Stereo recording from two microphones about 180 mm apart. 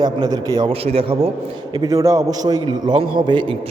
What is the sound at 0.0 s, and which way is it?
A man's voice, 20° right (ahead or behind).